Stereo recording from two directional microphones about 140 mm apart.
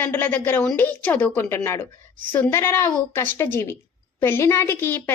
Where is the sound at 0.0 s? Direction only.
15° left (ahead or behind).